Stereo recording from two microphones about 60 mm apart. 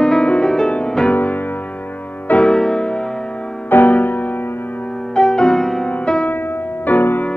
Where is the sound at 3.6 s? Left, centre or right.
Left.